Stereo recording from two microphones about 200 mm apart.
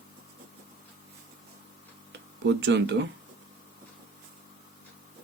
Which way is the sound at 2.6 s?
65° right (ahead or behind).